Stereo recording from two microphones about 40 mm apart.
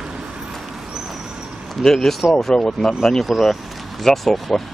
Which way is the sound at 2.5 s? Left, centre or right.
Left.